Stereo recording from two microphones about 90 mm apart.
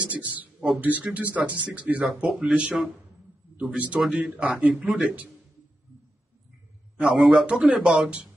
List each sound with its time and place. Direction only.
0.2 s a sound: 15° right (ahead or behind)
0.7 s speech: 20° right (ahead or behind)
7.0 s speech: 5° right (ahead or behind)